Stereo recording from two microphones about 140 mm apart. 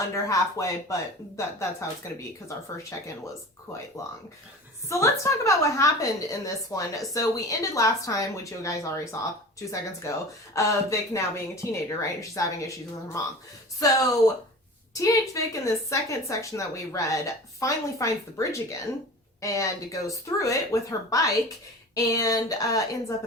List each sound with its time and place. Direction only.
0.3 s a woman's voice: 20° left (ahead or behind)
2.9 s a woman's voice: 20° left (ahead or behind)